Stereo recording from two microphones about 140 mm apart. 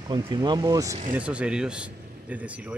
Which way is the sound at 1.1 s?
10° right (ahead or behind).